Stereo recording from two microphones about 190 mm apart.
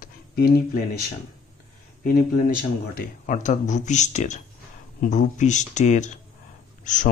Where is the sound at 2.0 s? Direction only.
45° left (ahead or behind).